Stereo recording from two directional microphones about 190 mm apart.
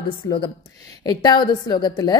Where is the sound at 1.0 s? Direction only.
20° left (ahead or behind).